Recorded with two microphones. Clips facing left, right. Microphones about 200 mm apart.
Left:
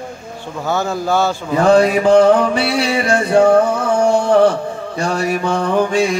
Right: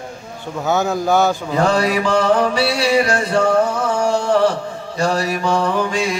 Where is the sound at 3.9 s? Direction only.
55° left (ahead or behind).